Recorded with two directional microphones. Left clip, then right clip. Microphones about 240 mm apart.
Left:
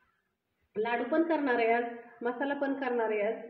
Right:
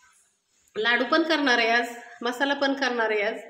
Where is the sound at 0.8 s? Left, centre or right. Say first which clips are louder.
Right 8 dB; right.